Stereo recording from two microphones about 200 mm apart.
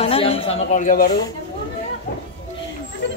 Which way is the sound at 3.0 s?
60° left (ahead or behind).